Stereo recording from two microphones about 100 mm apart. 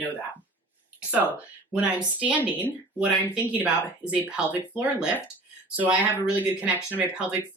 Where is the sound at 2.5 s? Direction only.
15° right (ahead or behind).